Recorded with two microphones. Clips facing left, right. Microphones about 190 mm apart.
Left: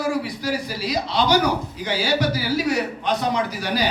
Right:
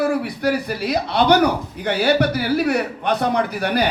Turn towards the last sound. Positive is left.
turn(degrees=-60)  # may be behind; listen again after turning